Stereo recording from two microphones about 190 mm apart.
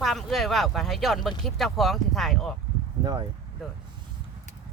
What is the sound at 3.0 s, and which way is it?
Speech, 20° right (ahead or behind).